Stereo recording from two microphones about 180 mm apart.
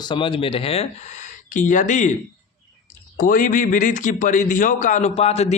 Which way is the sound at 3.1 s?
50° left (ahead or behind).